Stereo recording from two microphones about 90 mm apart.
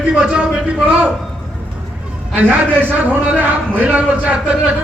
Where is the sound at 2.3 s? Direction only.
20° right (ahead or behind).